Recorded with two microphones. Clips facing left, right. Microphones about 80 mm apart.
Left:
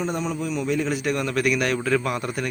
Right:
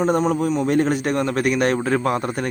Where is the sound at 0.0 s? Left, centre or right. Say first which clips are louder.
Right 8 dB; right.